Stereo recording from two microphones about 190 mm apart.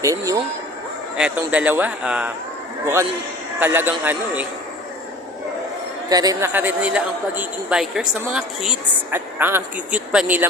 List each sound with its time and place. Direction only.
0.0 s a man's voice: 15° right (ahead or behind)
1.1 s a man's voice: 5° right (ahead or behind)
6.1 s a man's voice: 20° right (ahead or behind)